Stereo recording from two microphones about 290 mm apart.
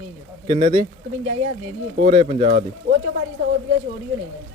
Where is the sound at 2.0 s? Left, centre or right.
Centre.